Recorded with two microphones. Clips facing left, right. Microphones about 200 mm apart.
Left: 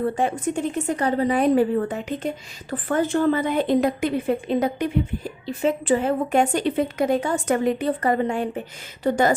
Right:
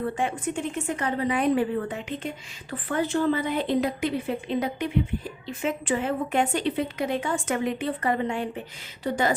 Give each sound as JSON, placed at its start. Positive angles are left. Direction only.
{"t": 0.0, "sound": "a woman's voice", "side_deg": 35}